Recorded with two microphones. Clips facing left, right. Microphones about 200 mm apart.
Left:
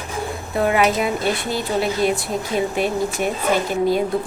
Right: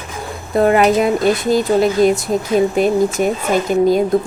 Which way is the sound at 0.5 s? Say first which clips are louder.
Right 6 dB; 45° right (ahead or behind).